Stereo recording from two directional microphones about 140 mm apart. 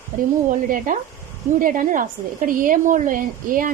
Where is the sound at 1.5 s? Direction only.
70° right (ahead or behind).